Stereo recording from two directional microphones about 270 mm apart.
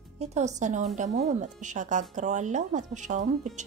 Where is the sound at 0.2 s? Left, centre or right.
Right.